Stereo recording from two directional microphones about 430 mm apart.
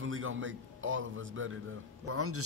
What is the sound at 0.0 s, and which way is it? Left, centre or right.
A man's voice, right.